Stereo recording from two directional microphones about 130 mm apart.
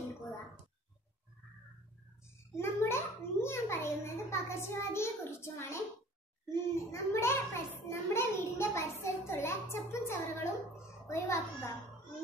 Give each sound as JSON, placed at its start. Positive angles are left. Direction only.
{"t": 2.5, "sound": "a child's voice", "side_deg": 20}